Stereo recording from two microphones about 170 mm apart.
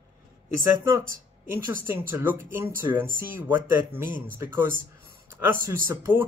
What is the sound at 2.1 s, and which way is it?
Speech, 10° right (ahead or behind).